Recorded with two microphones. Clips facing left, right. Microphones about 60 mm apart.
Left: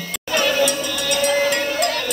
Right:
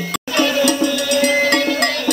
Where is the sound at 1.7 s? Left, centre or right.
Right.